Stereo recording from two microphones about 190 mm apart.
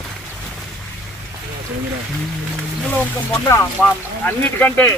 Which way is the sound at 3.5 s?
10° left (ahead or behind).